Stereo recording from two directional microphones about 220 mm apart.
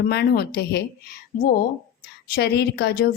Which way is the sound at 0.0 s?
45° left (ahead or behind).